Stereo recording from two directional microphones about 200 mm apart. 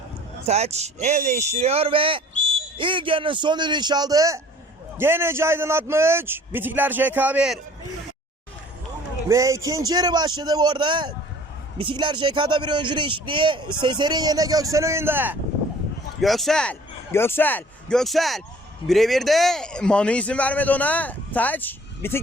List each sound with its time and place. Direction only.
0.4 s a man's voice: 35° right (ahead or behind); by 7.6 s 5° right (ahead or behind)
9.3 s a man's voice: 15° right (ahead or behind)
16.2 s a man's voice: centre (ahead or behind)